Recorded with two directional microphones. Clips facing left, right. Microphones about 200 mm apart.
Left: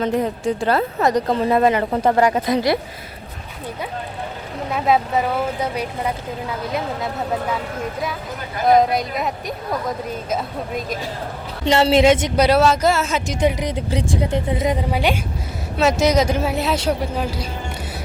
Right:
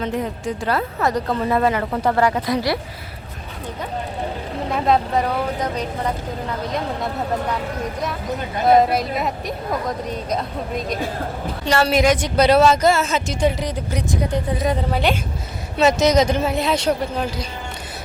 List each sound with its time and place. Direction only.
0.0 s a woman's voice: 35° left (ahead or behind); by 2.7 s 20° left (ahead or behind)
4.7 s speech: 5° left (ahead or behind)
8.6 s speech: centre (ahead or behind)
11.6 s a woman's voice: 25° left (ahead or behind)
12.4 s speech: 5° left (ahead or behind); by 14.8 s 25° left (ahead or behind)
14.8 s speech: 10° left (ahead or behind)